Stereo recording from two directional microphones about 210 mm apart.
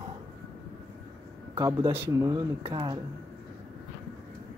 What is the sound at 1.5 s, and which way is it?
Speech, 15° right (ahead or behind).